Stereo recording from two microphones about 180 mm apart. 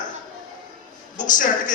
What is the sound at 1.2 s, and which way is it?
Speech, 45° left (ahead or behind).